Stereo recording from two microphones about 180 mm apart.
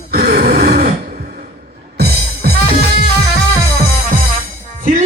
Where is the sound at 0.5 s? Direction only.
60° right (ahead or behind).